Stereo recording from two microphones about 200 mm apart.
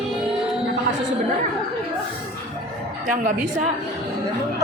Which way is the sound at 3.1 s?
40° right (ahead or behind).